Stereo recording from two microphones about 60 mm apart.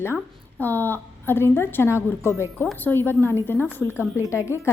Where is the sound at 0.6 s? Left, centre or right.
Left.